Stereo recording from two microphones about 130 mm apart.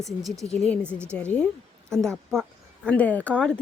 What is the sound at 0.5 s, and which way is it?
Speech, 10° left (ahead or behind).